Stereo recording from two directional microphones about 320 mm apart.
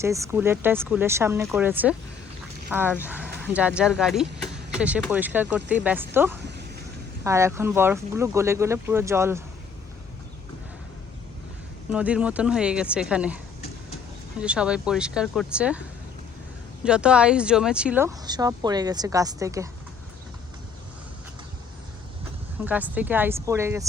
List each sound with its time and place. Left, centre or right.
0.0 s speech: centre
6.4 s vehicle: right
7.3 s speech: centre
11.9 s speech: centre
16.8 s speech: centre
22.6 s speech: centre